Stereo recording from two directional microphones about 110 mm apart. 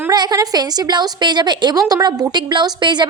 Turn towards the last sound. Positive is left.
turn(degrees=-45)  # may be behind; listen again after turning